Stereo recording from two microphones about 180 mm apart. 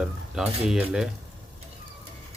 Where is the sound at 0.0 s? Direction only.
Centre (ahead or behind).